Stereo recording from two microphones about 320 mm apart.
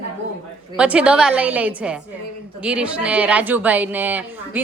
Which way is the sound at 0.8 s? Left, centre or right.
Centre.